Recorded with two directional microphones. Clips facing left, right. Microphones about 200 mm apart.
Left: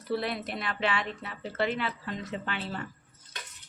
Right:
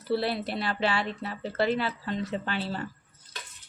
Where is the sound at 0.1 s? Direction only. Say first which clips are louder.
Right 3 dB; 30° right (ahead or behind).